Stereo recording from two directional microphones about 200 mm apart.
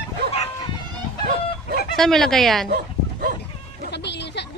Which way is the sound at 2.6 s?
45° right (ahead or behind).